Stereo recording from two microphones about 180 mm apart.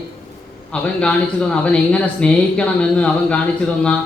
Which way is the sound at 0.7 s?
5° left (ahead or behind).